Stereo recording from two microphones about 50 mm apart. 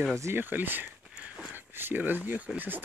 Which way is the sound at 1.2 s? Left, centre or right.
Right.